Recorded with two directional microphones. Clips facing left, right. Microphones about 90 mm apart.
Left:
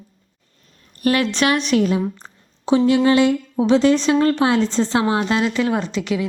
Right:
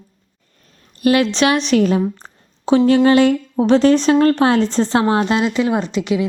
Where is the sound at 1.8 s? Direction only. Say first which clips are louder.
Right 3 dB; 45° right (ahead or behind).